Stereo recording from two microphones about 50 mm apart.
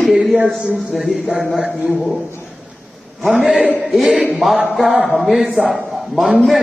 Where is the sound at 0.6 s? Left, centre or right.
Right.